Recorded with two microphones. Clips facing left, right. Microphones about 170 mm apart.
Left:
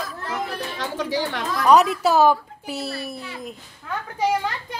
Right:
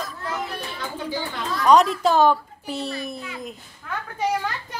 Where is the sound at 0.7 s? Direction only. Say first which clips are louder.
Left 5 dB; 90° left.